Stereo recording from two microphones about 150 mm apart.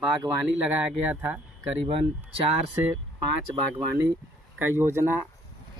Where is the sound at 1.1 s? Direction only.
10° right (ahead or behind).